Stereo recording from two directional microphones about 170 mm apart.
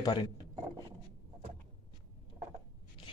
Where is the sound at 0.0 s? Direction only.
25° left (ahead or behind).